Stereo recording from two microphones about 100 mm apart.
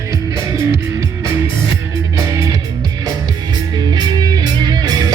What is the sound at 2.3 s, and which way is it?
Music, 35° right (ahead or behind).